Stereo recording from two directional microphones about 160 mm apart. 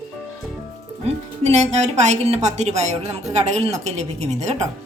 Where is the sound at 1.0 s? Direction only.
45° right (ahead or behind).